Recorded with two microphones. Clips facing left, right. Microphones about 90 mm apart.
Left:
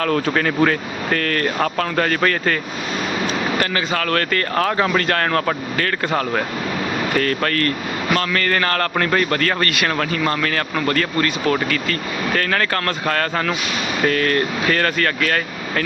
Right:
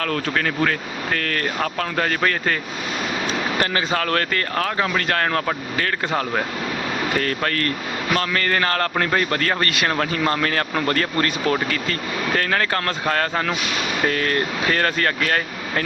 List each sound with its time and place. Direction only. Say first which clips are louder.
0.0 s speech: left 4 dB; 10° left (ahead or behind)
1.2 s speech: left 5 dB; 5° right (ahead or behind)
3.6 s speech: left 1 dB; 25° right (ahead or behind)
4.5 s speech: left 5 dB; centre (ahead or behind)
5.0 s speech: left 2 dB; 10° right (ahead or behind)
7.2 s speech: left 3 dB; 20° right (ahead or behind)
12.4 s speech: left 2 dB; 20° right (ahead or behind)